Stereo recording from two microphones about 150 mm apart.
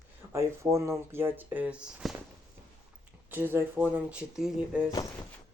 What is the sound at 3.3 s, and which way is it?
Speech, 15° right (ahead or behind).